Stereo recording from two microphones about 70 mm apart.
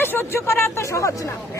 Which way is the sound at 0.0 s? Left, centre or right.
Left.